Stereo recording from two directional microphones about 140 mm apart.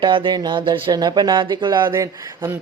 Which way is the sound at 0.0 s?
35° right (ahead or behind).